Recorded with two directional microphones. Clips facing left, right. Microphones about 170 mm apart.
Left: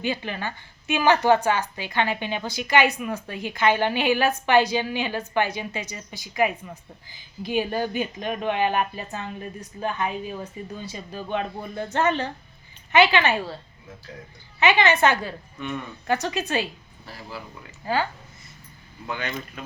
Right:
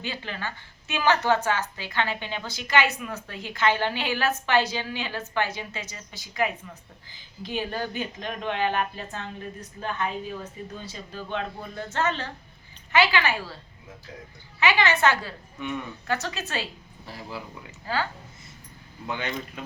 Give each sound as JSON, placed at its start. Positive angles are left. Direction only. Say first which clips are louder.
{"t": 0.0, "sound": "a woman's voice", "louder": "left 6 dB", "side_deg": 15}
{"t": 14.6, "sound": "a woman's voice", "louder": "left 3 dB", "side_deg": 20}
{"t": 15.6, "sound": "speech", "louder": "even", "side_deg": -15}
{"t": 16.0, "sound": "a woman's voice", "louder": "left 6 dB", "side_deg": 15}
{"t": 17.9, "sound": "a woman's voice", "louder": "left 4 dB", "side_deg": 15}
{"t": 19.0, "sound": "speech", "louder": "even", "side_deg": -20}